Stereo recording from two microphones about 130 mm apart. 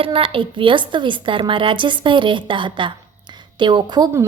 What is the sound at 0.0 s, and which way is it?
A woman's voice, 45° right (ahead or behind).